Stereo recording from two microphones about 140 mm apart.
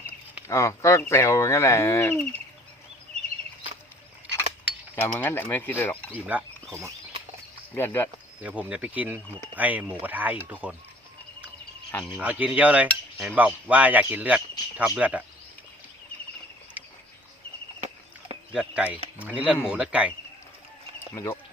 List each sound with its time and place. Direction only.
0.4 s speech: 20° left (ahead or behind)
4.9 s mechanisms: 15° left (ahead or behind)
6.1 s speech: 10° right (ahead or behind)
7.7 s mechanisms: 15° left (ahead or behind)
8.4 s speech: 10° right (ahead or behind)
12.1 s speech: 10° right (ahead or behind)
16.8 s a sound: 10° right (ahead or behind)
18.5 s speech: 10° right (ahead or behind)
21.1 s speech: 25° left (ahead or behind)